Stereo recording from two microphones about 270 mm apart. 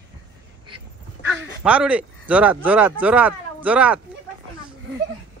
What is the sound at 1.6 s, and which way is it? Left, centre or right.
Speech, centre.